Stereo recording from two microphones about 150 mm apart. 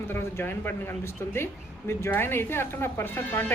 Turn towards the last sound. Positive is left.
turn(degrees=15)  # may be behind; listen again after turning